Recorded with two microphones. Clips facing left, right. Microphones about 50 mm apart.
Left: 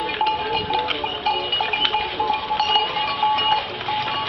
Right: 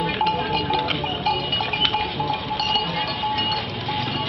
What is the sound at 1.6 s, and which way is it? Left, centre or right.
Goat, centre.